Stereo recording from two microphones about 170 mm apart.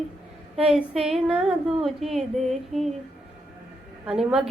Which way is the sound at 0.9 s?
Centre (ahead or behind).